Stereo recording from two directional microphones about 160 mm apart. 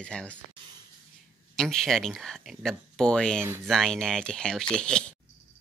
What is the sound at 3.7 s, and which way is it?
Speech, centre (ahead or behind).